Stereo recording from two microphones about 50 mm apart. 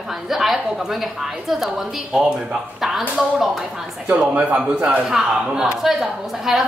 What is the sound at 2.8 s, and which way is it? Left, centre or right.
Speech, centre.